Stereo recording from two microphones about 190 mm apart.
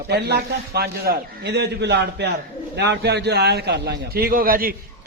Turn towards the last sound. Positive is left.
turn(degrees=-50)  # may be behind; listen again after turning